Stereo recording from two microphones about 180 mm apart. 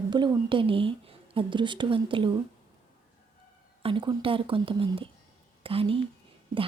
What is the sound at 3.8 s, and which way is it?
A woman's voice, 30° right (ahead or behind).